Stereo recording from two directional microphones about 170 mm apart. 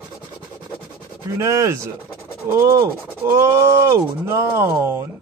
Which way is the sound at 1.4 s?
15° right (ahead or behind).